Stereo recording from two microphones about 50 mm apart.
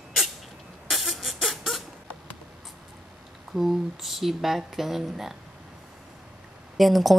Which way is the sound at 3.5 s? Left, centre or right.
Centre.